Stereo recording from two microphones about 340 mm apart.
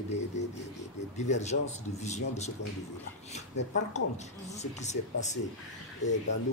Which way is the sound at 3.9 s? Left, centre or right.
Centre.